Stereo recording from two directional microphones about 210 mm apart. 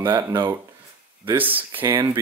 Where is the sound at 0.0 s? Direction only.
20° right (ahead or behind).